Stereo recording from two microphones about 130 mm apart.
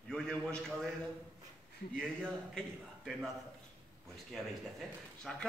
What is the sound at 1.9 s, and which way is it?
Speech, 5° left (ahead or behind).